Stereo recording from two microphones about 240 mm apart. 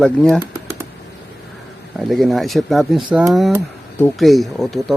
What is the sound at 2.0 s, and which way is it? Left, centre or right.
Speech, centre.